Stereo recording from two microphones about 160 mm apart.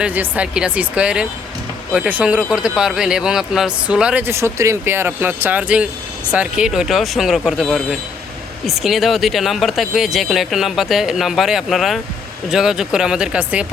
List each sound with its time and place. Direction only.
0.0 s speech: 10° right (ahead or behind)